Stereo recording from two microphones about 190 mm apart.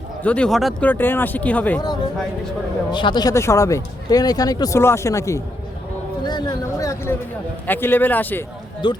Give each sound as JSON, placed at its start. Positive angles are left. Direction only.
{"t": 0.2, "sound": "speech", "side_deg": 5}
{"t": 2.9, "sound": "speech", "side_deg": 25}
{"t": 8.8, "sound": "speech", "side_deg": 25}